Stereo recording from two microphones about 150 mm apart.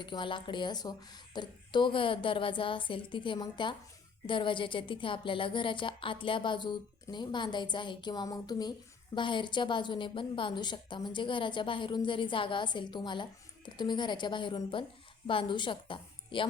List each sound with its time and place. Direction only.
0.0 s a woman's voice: 30° left (ahead or behind)